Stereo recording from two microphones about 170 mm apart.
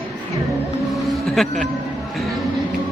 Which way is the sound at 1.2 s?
Centre (ahead or behind).